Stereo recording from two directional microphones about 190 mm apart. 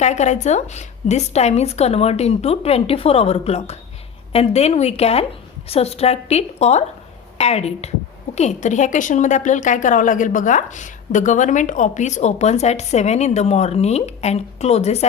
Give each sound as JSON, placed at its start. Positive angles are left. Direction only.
{"t": 0.0, "sound": "a woman's voice", "side_deg": 35}